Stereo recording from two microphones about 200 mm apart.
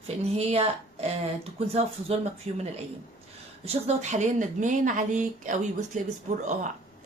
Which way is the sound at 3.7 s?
35° right (ahead or behind).